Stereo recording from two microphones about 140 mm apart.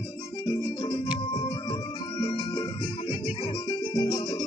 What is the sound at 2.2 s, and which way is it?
Music, 35° left (ahead or behind).